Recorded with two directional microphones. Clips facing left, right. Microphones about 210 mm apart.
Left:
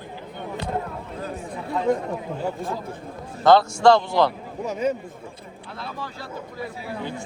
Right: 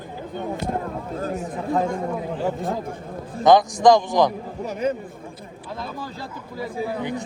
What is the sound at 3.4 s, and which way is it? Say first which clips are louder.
Speech: right 1 dB; 15° right (ahead or behind).